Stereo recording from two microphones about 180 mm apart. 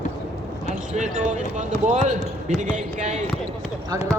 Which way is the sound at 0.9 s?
45° right (ahead or behind).